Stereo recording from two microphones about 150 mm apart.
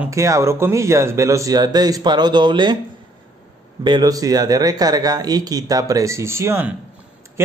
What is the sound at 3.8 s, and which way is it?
A man's voice, 25° right (ahead or behind).